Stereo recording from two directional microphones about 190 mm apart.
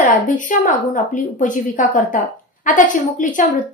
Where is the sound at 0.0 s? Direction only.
45° left (ahead or behind).